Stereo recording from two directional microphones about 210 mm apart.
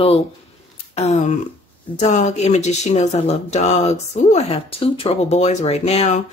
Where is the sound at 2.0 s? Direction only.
35° left (ahead or behind).